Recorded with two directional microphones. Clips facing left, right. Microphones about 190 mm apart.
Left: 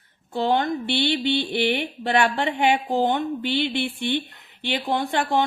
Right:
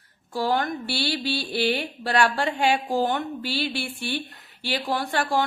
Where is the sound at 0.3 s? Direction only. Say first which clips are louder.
Left 3 dB; 20° left (ahead or behind).